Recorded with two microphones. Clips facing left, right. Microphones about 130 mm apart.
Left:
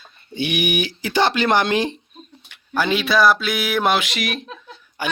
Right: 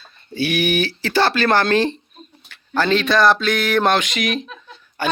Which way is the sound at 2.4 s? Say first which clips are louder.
Right 2 dB; 15° left (ahead or behind).